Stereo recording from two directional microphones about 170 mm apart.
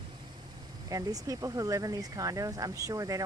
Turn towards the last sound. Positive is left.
turn(degrees=-20)  # may be behind; listen again after turning